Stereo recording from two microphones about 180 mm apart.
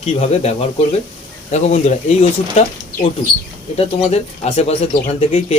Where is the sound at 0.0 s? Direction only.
35° left (ahead or behind).